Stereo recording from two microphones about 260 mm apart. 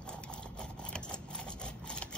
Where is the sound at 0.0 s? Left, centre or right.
Centre.